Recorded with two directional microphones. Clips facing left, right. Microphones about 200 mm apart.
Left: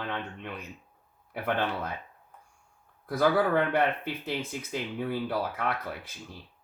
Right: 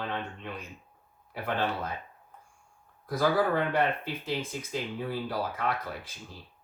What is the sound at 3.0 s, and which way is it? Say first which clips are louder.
Speech: left 1 dB; 55° left (ahead or behind).